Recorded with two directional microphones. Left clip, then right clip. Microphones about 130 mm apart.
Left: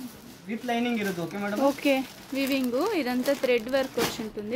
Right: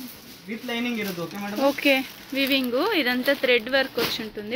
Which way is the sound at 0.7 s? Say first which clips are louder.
Left 1 dB; 5° left (ahead or behind).